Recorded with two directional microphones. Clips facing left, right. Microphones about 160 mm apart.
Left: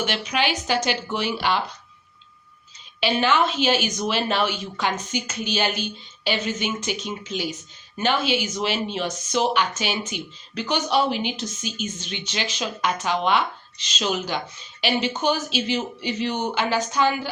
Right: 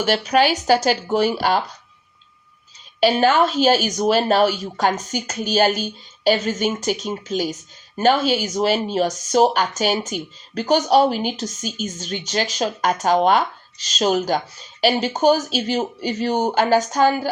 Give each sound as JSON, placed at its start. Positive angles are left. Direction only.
{"t": 0.0, "sound": "a woman's voice", "side_deg": -40}
{"t": 3.0, "sound": "a woman's voice", "side_deg": -40}